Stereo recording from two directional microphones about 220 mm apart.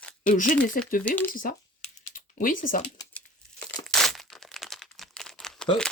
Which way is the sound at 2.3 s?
40° left (ahead or behind).